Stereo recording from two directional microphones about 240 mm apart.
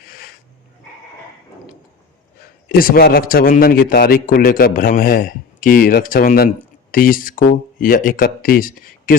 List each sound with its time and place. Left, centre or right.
2.6 s a man's voice: left